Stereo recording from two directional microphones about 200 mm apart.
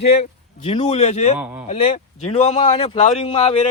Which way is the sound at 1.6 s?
30° left (ahead or behind).